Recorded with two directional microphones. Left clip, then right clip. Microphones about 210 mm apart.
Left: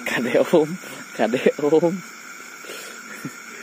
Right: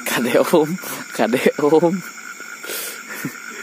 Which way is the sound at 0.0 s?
30° right (ahead or behind).